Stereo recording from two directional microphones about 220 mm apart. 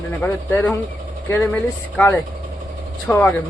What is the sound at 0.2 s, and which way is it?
Speech, 5° left (ahead or behind).